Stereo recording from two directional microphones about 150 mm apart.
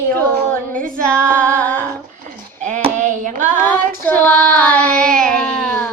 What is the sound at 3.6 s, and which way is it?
Child singing, 10° left (ahead or behind).